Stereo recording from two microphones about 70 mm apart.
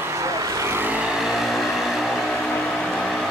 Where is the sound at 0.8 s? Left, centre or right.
Right.